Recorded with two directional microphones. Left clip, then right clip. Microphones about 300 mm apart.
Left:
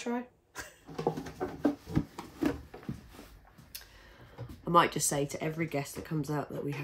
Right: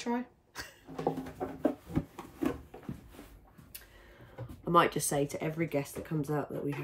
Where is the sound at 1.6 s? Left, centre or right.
Left.